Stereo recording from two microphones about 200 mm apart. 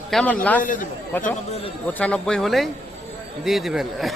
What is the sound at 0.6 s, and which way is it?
Speech, 40° left (ahead or behind).